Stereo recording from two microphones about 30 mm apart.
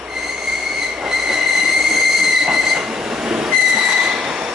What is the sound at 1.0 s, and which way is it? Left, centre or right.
Train, centre.